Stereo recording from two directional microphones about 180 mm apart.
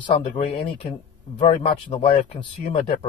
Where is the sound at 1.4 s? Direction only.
30° left (ahead or behind).